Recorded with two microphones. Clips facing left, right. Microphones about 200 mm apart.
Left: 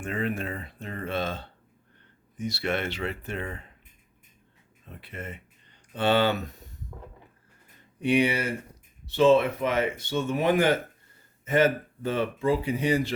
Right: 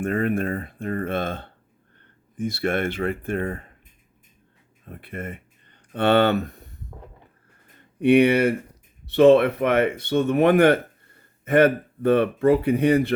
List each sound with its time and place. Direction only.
0.0 s speech: 55° right (ahead or behind)
4.9 s speech: 55° right (ahead or behind)
8.0 s speech: 60° right (ahead or behind)